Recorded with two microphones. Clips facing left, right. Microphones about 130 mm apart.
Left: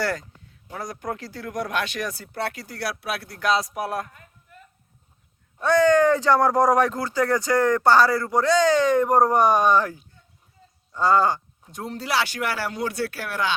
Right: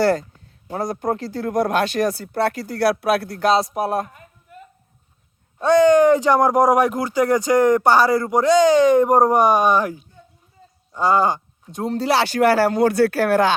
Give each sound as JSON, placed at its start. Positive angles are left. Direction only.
{"t": 0.0, "sound": "speech", "side_deg": -30}
{"t": 5.5, "sound": "speech", "side_deg": -20}
{"t": 11.7, "sound": "speech", "side_deg": -30}